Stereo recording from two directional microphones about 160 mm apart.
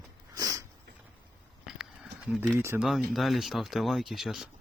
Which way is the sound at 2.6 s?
15° right (ahead or behind).